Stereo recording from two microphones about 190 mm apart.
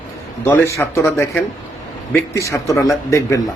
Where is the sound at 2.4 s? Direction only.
15° left (ahead or behind).